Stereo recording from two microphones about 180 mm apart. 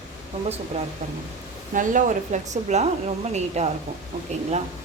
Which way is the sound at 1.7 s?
45° right (ahead or behind).